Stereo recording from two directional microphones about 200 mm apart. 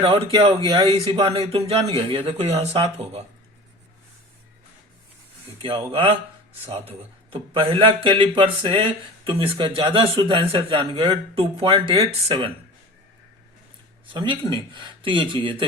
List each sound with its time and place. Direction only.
0.0 s speech: 25° right (ahead or behind)
5.6 s speech: 25° right (ahead or behind)
7.3 s speech: 30° right (ahead or behind)
14.1 s speech: 25° right (ahead or behind)